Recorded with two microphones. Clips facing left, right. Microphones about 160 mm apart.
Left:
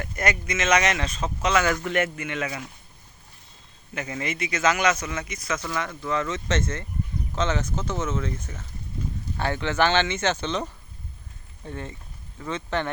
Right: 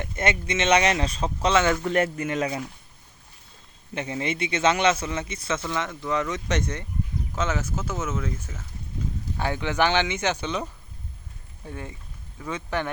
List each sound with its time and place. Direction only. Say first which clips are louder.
0.0 s speech: right 1 dB; 25° right (ahead or behind)
3.9 s a man's voice: right 2 dB; 30° right (ahead or behind); by 12.9 s 10° right (ahead or behind)